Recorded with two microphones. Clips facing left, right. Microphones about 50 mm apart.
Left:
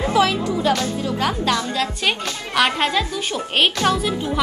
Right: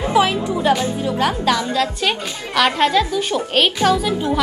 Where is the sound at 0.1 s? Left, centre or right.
Right.